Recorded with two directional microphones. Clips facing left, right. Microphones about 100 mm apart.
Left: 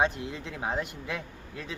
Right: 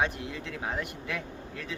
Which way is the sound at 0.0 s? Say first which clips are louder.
Left 2 dB; 20° left (ahead or behind).